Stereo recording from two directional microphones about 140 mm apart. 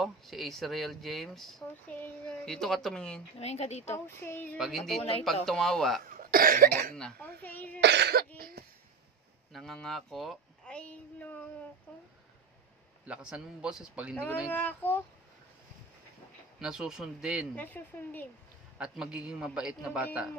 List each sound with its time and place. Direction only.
0.0 s speech: centre (ahead or behind)
2.0 s a sound: 10° left (ahead or behind)
3.3 s speech: 50° left (ahead or behind)
3.9 s speech: 15° left (ahead or behind)
4.6 s speech: centre (ahead or behind)
6.1 s cough: 90° right
7.0 s cough: 10° left (ahead or behind)
8.1 s cough: 90° right
9.5 s a sound: centre (ahead or behind)
13.0 s a man's voice: 5° right (ahead or behind)
14.5 s speech: 10° left (ahead or behind)
16.5 s speech: 5° right (ahead or behind)
17.6 s speech: 15° left (ahead or behind)
18.8 s a man's voice: 5° right (ahead or behind)